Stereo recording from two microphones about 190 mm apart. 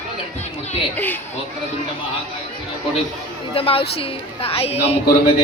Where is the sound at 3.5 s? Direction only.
30° left (ahead or behind).